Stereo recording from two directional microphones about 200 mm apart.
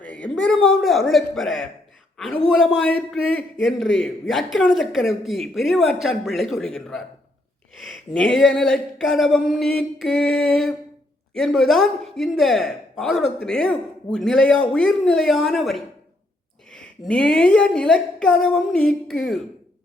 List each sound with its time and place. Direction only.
0.0 s a man's voice: 5° left (ahead or behind)